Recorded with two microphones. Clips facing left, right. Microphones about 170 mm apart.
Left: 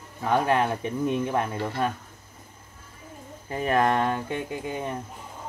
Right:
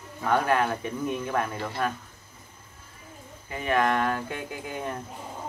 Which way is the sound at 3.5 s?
35° left (ahead or behind).